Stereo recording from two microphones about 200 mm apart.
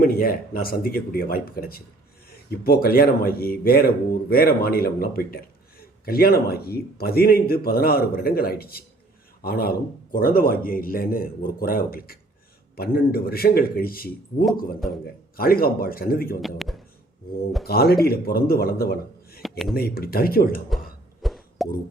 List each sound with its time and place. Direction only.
0.0 s speech: 45° left (ahead or behind)
16.6 s a sound: centre (ahead or behind)
17.7 s speech: 50° left (ahead or behind)
19.4 s a sound: centre (ahead or behind)
19.7 s speech: 50° left (ahead or behind)
21.2 s plop: centre (ahead or behind)